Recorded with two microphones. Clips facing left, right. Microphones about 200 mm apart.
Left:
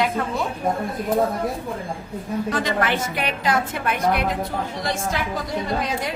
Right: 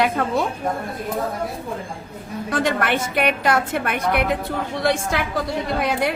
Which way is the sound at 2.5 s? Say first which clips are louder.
Right 4 dB; 60° right (ahead or behind).